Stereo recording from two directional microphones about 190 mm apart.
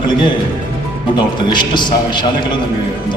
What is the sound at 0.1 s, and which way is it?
A man's voice, 25° left (ahead or behind).